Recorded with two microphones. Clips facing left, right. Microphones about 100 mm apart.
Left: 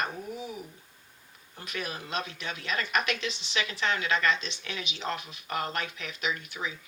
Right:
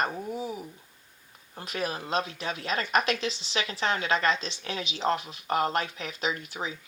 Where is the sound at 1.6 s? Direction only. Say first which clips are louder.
Right 5 dB; 35° right (ahead or behind).